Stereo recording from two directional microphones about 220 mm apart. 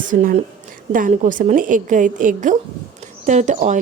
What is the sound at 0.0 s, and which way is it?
Speech, 35° right (ahead or behind).